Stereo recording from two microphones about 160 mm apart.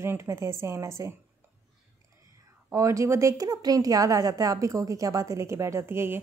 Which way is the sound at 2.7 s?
20° right (ahead or behind).